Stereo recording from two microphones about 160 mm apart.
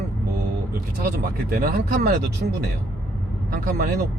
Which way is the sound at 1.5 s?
70° right (ahead or behind).